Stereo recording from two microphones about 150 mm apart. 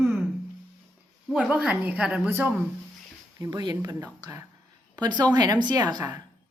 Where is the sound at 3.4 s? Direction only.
30° right (ahead or behind).